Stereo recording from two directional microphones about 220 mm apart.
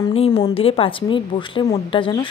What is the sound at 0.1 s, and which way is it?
A woman's voice, 25° left (ahead or behind).